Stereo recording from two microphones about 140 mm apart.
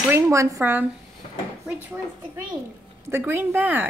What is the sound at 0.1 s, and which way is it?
Speech, 20° right (ahead or behind).